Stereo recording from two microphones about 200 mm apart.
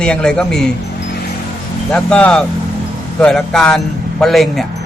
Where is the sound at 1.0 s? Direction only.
50° left (ahead or behind).